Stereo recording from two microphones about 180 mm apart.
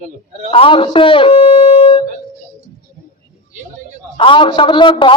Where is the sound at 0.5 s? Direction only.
30° left (ahead or behind).